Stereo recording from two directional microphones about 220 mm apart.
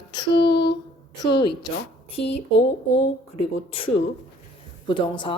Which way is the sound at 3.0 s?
25° left (ahead or behind).